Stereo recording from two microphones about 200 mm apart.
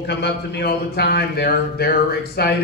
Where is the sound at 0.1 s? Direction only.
55° left (ahead or behind).